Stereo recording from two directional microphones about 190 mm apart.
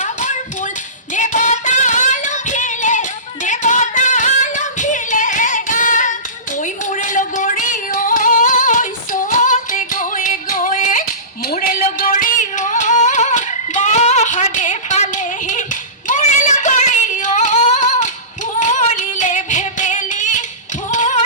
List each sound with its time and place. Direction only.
0.0 s a sound: 40° left (ahead or behind)
1.1 s singing: 40° left (ahead or behind)
6.6 s a sound: 40° left (ahead or behind)
11.5 s music: 45° left (ahead or behind)
18.6 s singing: 40° left (ahead or behind)
20.9 s music: 40° left (ahead or behind)